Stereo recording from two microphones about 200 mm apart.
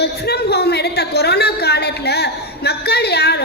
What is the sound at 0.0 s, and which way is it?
A woman's voice, 55° left (ahead or behind).